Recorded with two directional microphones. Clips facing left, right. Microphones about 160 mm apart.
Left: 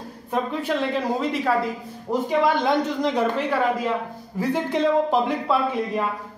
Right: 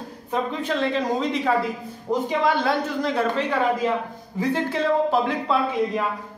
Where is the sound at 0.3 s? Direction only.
10° left (ahead or behind).